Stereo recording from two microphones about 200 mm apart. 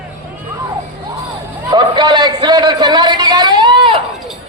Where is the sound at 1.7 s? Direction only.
20° right (ahead or behind).